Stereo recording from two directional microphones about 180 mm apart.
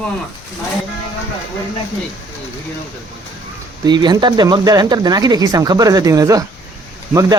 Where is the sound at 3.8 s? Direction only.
25° right (ahead or behind).